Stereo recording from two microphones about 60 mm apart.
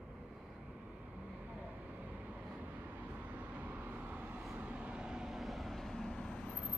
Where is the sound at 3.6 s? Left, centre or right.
Right; by 6.5 s centre.